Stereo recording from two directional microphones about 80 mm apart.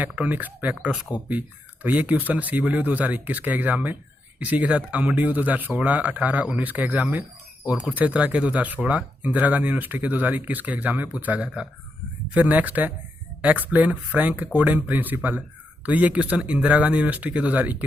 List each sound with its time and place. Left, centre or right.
0.0 s speech: right
7.2 s a sound: centre
7.9 s speech: centre